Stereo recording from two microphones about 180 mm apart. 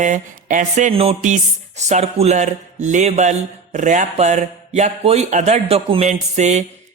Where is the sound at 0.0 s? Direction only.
45° right (ahead or behind).